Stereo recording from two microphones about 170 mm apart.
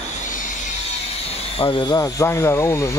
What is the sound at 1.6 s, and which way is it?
Speech, 30° left (ahead or behind).